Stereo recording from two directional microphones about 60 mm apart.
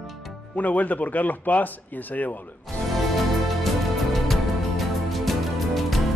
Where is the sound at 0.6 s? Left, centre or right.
Left.